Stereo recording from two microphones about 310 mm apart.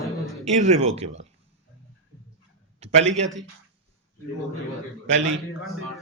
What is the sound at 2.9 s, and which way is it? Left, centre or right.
Speech, right.